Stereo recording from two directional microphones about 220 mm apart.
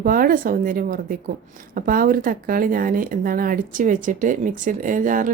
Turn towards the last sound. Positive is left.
turn(degrees=-35)  # may be behind; listen again after turning